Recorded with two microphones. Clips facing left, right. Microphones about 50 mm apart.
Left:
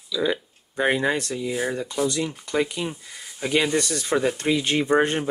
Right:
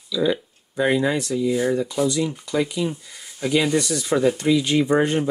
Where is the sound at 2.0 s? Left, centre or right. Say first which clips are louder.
Right 3 dB; left.